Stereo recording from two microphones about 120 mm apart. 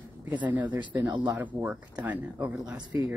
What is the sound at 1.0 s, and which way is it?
Speech, 40° right (ahead or behind).